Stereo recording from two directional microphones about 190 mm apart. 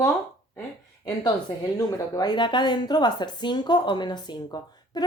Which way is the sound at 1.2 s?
15° left (ahead or behind).